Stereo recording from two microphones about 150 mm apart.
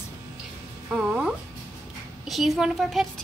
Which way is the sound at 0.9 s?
5° right (ahead or behind).